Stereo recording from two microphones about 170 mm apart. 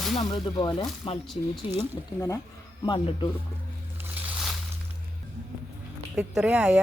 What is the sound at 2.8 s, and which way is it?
Speech, 30° left (ahead or behind).